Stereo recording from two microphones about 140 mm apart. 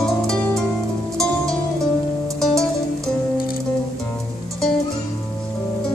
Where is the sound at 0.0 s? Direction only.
5° left (ahead or behind).